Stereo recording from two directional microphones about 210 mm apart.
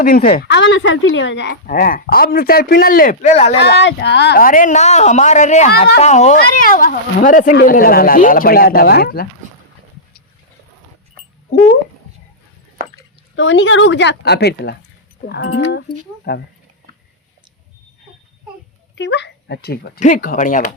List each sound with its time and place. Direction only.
0.0 s speech: 40° left (ahead or behind)
3.6 s a woman's voice: 50° left (ahead or behind)
13.3 s speech: 60° left (ahead or behind)
16.3 s speech: 50° left (ahead or behind)
18.9 s speech: 55° left (ahead or behind); by 20.7 s 40° left (ahead or behind)